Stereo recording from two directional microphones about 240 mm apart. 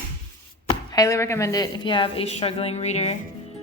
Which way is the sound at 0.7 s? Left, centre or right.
Centre.